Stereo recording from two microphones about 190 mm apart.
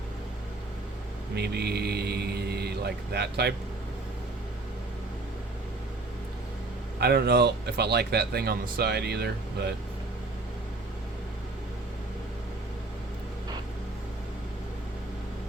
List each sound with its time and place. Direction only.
1.4 s speech: 60° right (ahead or behind)
7.0 s speech: 60° right (ahead or behind)